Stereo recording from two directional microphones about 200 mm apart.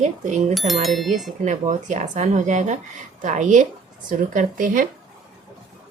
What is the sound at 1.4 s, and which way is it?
A woman's voice, 35° right (ahead or behind).